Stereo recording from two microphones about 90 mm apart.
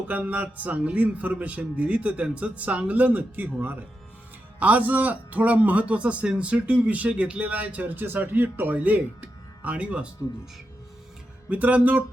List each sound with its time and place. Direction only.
0.1 s a man's voice: 15° right (ahead or behind)
11.4 s a man's voice: 15° right (ahead or behind)